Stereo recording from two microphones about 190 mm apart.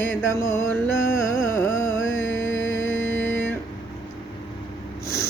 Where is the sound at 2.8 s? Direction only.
90° left.